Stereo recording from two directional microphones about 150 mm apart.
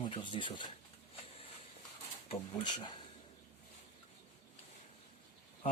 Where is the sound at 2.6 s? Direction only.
30° left (ahead or behind).